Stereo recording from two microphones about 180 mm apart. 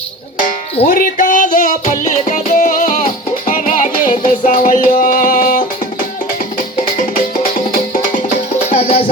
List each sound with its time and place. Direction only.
0.9 s music: 50° left (ahead or behind)
7.4 s music: 50° left (ahead or behind)
8.7 s music: 35° left (ahead or behind)